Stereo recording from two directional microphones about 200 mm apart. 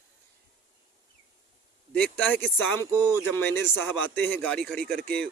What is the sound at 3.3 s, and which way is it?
Speech, 10° left (ahead or behind).